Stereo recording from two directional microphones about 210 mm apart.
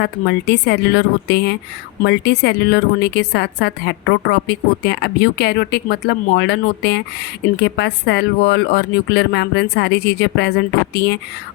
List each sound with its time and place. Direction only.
0.0 s a woman's voice: 55° left (ahead or behind)